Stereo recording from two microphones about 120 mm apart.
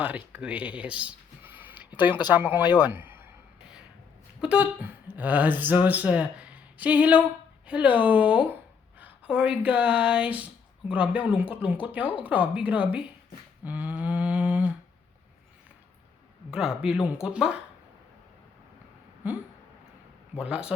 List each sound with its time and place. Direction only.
0.0 s speech: 15° right (ahead or behind)
4.4 s speech: 10° right (ahead or behind)
13.7 s a sound: 10° right (ahead or behind)
16.5 s speech: 5° right (ahead or behind)
19.2 s speech: 15° right (ahead or behind)
20.4 s speech: 10° right (ahead or behind)